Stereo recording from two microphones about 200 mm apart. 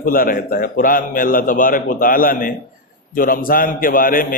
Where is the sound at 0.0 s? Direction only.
45° left (ahead or behind).